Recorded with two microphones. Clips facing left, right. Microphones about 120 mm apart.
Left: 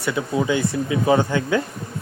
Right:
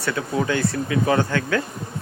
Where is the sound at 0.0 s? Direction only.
15° left (ahead or behind).